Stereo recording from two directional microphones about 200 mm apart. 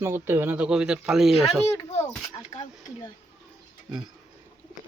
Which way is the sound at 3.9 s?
5° right (ahead or behind).